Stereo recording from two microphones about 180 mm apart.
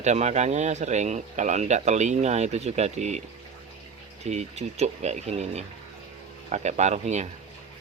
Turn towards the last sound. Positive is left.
turn(degrees=-40)  # may be behind; listen again after turning